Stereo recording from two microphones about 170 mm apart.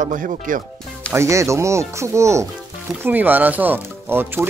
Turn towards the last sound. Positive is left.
turn(degrees=-10)  # may be behind; listen again after turning